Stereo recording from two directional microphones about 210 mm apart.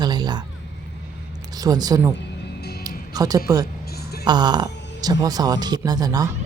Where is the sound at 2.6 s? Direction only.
50° left (ahead or behind).